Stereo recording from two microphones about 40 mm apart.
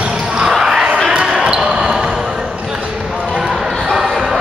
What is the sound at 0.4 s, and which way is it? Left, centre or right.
Basketball bounce, centre.